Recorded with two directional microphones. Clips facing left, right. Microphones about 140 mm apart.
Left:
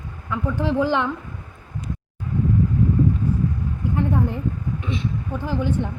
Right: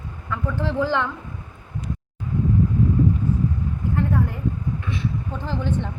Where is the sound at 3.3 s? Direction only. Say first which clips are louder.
Even; 10° left (ahead or behind).